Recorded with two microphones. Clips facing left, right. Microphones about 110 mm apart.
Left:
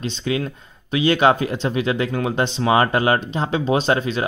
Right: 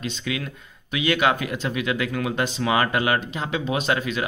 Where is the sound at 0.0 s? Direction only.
30° left (ahead or behind).